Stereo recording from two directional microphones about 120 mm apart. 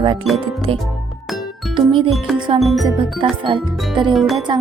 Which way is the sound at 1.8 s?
45° right (ahead or behind).